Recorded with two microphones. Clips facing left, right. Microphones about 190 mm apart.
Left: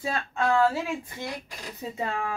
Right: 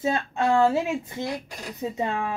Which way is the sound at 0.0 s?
25° right (ahead or behind).